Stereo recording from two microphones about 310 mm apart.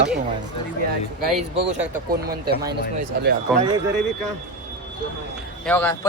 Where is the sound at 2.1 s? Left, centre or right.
Right.